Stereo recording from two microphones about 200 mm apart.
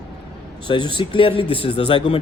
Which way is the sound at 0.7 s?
25° left (ahead or behind).